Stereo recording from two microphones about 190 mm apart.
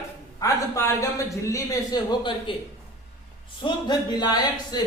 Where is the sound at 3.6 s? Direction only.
20° left (ahead or behind).